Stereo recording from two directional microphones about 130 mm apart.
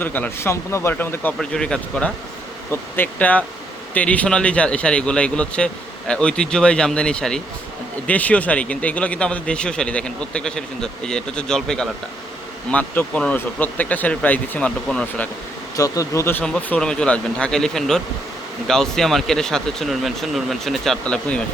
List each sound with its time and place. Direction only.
0.0 s speech: 15° left (ahead or behind)
15.7 s speech: 25° left (ahead or behind)
16.4 s speech: 10° left (ahead or behind)